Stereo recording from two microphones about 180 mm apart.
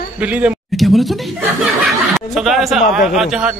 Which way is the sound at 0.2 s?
5° right (ahead or behind).